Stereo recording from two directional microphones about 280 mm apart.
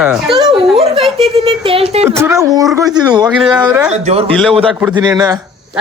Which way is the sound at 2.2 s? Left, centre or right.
Centre.